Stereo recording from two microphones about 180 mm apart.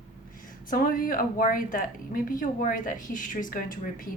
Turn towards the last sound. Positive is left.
turn(degrees=50)  # may be behind; listen again after turning